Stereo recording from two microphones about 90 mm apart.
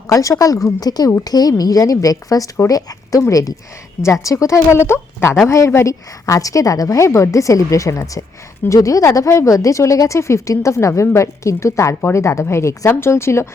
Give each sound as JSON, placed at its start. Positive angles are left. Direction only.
{"t": 0.1, "sound": "speech", "side_deg": 40}